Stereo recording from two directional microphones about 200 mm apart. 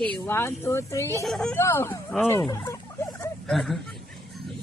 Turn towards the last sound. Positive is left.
turn(degrees=0)  # may be behind; listen again after turning